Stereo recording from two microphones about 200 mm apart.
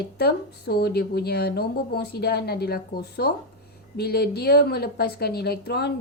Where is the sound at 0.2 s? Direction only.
55° left (ahead or behind).